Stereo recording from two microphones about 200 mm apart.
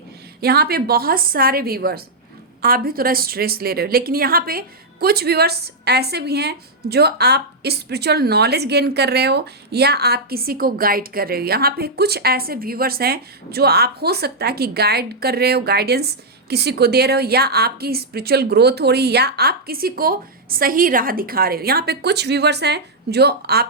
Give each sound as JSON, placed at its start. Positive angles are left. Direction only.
{"t": 0.4, "sound": "a woman's voice", "side_deg": -50}